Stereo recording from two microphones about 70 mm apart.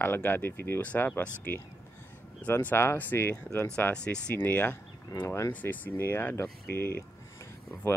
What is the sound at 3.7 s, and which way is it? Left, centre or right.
Speech, centre.